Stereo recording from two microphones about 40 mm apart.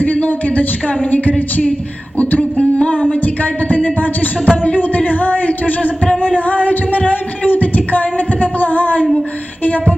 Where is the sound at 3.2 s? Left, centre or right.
Left.